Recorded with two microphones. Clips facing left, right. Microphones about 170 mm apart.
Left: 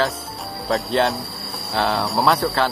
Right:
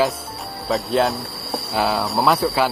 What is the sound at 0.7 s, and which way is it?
Speech, centre (ahead or behind).